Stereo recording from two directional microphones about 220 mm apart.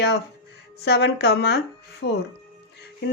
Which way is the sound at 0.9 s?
50° left (ahead or behind).